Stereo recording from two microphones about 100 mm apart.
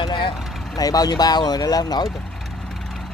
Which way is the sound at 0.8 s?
40° left (ahead or behind).